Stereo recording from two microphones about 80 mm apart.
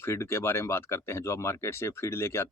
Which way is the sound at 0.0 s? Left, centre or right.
Left.